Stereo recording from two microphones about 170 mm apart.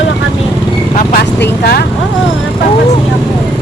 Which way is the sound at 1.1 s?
65° left (ahead or behind).